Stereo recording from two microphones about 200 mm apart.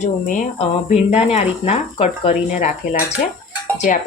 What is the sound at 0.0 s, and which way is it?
Speech, 40° left (ahead or behind).